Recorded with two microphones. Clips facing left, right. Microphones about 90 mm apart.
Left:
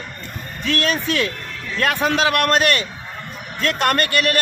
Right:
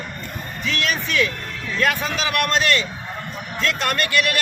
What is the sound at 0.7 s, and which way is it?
A man's voice, 55° left (ahead or behind).